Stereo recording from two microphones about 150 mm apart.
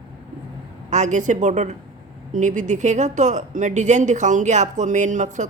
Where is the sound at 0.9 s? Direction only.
50° right (ahead or behind).